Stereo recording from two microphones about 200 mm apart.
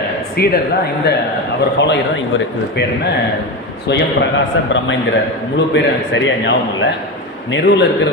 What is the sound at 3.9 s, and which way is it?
Speech, 55° left (ahead or behind).